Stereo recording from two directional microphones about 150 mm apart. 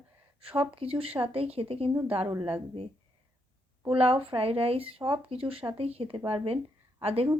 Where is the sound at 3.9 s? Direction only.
40° right (ahead or behind).